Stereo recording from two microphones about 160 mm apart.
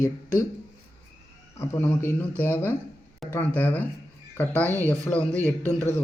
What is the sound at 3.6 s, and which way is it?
A man's voice, 10° left (ahead or behind).